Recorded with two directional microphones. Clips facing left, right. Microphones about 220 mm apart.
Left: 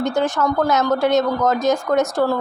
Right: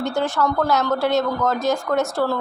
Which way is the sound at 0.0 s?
20° left (ahead or behind).